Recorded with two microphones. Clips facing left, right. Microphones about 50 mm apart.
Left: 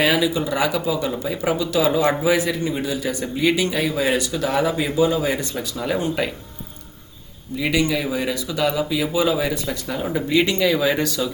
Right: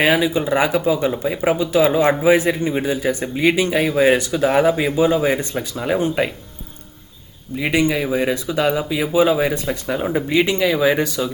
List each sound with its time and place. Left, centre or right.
0.0 s a man's voice: right
7.5 s speech: right